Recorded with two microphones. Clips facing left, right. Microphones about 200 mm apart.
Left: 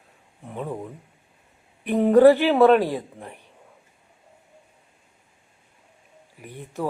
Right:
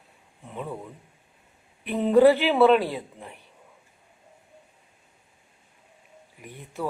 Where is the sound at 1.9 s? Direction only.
15° left (ahead or behind).